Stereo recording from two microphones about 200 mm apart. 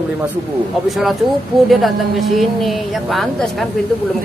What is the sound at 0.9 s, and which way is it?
Speech, centre (ahead or behind).